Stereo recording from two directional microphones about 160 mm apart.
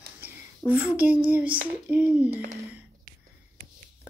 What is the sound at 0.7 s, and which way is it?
A child's voice, 10° right (ahead or behind).